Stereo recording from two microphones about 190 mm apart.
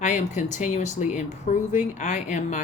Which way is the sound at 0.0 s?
40° left (ahead or behind).